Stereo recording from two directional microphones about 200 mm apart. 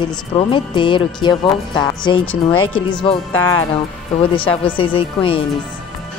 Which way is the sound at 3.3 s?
10° left (ahead or behind).